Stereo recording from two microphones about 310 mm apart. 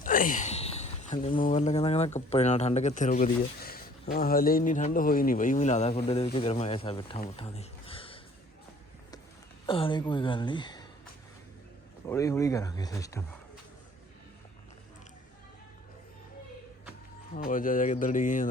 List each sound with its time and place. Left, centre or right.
0.0 s speech: left
7.3 s a sound: centre
9.6 s speech: centre
12.0 s speech: centre
17.3 s speech: left